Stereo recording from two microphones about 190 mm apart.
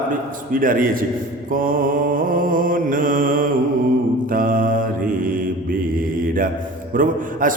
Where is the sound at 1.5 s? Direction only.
45° right (ahead or behind).